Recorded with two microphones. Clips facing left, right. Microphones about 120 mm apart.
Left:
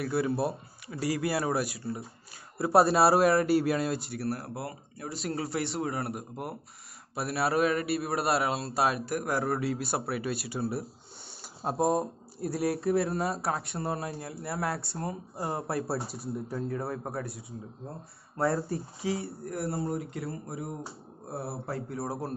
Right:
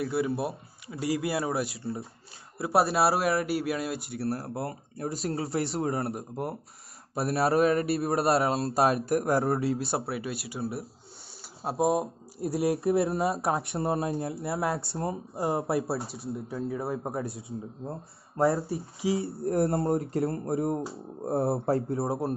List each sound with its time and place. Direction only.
0.0 s speech: 20° right (ahead or behind)
2.6 s a man's voice: 5° right (ahead or behind)
4.1 s a man's voice: 30° right (ahead or behind); by 9.1 s 45° right (ahead or behind)
9.1 s a man's voice: 30° right (ahead or behind); by 12.4 s 5° right (ahead or behind)
12.6 s speech: 25° right (ahead or behind)
13.1 s a man's voice: centre (ahead or behind)
13.4 s speech: 20° right (ahead or behind)
15.9 s a man's voice: centre (ahead or behind)
17.0 s speech: 25° right (ahead or behind)
19.0 s speech: 25° right (ahead or behind)
19.7 s speech: 45° right (ahead or behind)
20.2 s speech: 50° right (ahead or behind)
21.6 s speech: 30° right (ahead or behind)